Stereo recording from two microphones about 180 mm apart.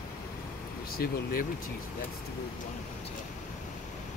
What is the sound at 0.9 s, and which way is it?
Speech, 55° left (ahead or behind).